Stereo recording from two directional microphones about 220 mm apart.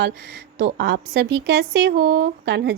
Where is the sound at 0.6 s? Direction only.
50° right (ahead or behind).